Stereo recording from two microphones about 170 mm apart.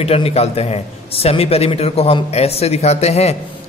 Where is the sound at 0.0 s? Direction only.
35° left (ahead or behind).